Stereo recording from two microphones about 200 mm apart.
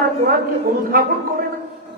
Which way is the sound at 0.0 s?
45° right (ahead or behind).